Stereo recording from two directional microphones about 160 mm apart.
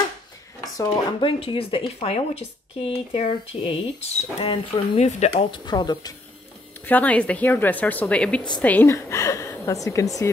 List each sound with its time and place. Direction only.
1.2 s speech: 35° left (ahead or behind)
6.9 s a woman's voice: 10° left (ahead or behind)